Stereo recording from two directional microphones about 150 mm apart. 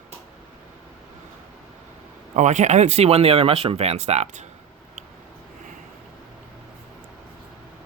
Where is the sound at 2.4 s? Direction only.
55° right (ahead or behind).